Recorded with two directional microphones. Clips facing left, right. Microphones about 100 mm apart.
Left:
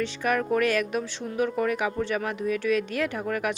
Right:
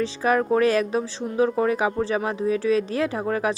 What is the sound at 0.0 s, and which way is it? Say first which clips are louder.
Speech: right 4 dB; 30° right (ahead or behind).